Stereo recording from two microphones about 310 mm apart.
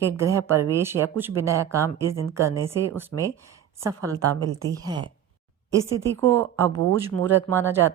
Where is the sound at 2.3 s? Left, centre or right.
Centre.